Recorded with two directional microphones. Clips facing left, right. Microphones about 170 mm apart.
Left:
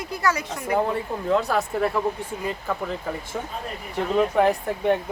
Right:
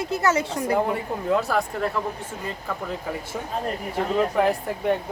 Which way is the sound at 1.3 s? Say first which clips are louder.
Even; centre (ahead or behind).